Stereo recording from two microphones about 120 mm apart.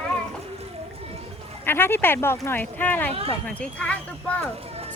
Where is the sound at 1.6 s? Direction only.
20° left (ahead or behind).